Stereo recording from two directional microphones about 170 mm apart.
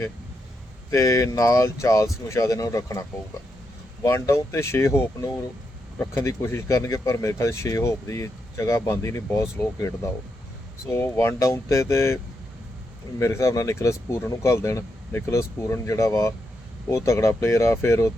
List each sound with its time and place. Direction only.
0.9 s speech: 20° left (ahead or behind)
4.0 s speech: 15° left (ahead or behind)
6.0 s speech: 15° left (ahead or behind)